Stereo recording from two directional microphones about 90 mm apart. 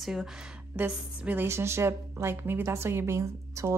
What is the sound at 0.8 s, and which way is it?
A woman's voice, 20° right (ahead or behind).